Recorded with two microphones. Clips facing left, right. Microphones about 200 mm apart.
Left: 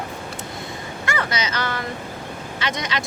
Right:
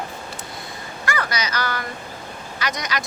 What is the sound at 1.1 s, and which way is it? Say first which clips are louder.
Speech: even; 25° left (ahead or behind).